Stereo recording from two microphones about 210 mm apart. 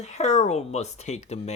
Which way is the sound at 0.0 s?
30° left (ahead or behind).